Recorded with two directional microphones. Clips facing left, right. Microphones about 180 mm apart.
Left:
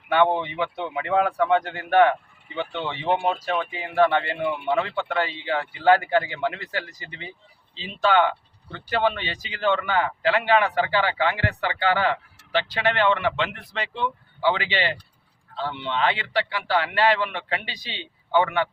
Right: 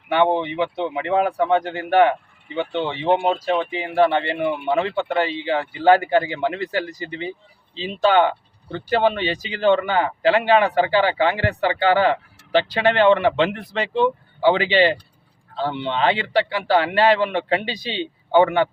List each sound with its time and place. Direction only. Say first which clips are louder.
0.1 s a man's voice: right 2 dB; 25° right (ahead or behind)